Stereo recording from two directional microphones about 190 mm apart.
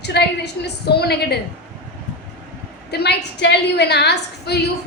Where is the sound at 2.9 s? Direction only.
60° left (ahead or behind).